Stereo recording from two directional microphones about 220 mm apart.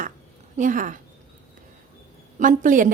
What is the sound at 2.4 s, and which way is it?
Speech, 35° right (ahead or behind).